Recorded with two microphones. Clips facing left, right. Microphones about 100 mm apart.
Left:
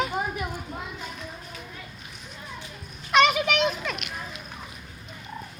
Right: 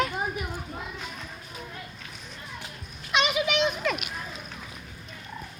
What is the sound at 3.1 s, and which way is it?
Children playing, 45° left (ahead or behind).